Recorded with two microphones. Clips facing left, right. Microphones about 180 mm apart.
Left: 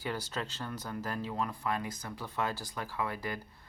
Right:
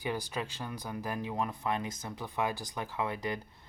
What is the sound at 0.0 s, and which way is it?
Speech, 15° right (ahead or behind).